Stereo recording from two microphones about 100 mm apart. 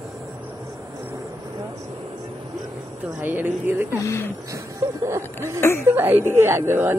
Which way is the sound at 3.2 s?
20° right (ahead or behind).